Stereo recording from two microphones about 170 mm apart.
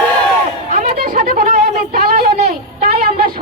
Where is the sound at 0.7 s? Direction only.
40° right (ahead or behind).